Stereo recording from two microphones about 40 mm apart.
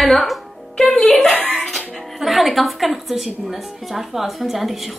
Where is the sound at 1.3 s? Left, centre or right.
Left.